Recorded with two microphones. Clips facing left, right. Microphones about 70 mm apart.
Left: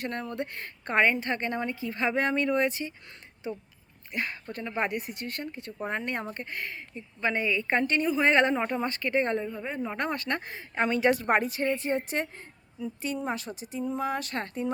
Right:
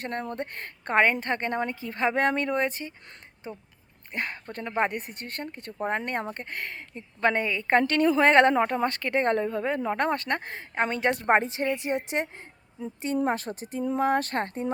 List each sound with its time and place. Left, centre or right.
0.0 s a woman's voice: right
7.8 s a woman's voice: right
8.3 s a woman's voice: right
9.8 s speech: right
11.3 s a woman's voice: right
13.1 s a woman's voice: right